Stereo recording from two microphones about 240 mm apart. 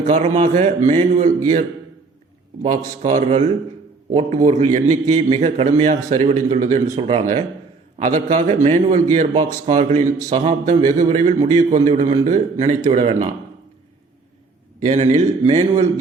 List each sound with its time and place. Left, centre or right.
0.0 s a man's voice: right
2.6 s a man's voice: right
14.8 s a man's voice: right